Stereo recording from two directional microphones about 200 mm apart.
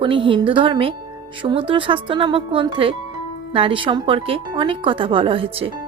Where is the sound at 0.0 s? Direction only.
25° right (ahead or behind).